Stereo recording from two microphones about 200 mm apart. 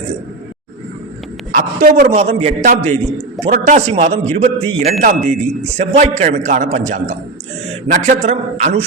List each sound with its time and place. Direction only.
1.5 s speech: 45° right (ahead or behind)
2.1 s a man's voice: 30° right (ahead or behind)